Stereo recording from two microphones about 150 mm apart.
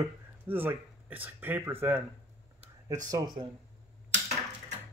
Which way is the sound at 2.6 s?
55° right (ahead or behind).